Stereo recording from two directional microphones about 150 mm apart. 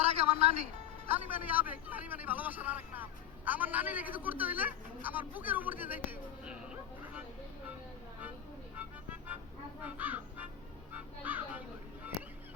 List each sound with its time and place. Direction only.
0.0 s music: 40° right (ahead or behind)
1.0 s a man's voice: 10° right (ahead or behind)
9.8 s crow: 10° right (ahead or behind)
10.9 s music: 10° right (ahead or behind)